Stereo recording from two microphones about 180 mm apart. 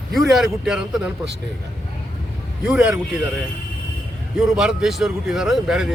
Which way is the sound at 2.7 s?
5° right (ahead or behind).